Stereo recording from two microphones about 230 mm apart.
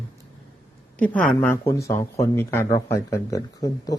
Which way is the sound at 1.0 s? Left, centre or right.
Centre.